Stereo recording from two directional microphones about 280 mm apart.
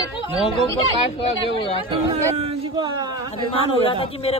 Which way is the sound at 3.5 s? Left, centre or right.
Centre.